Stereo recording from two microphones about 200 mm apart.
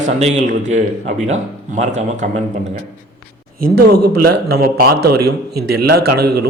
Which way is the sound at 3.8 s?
55° right (ahead or behind).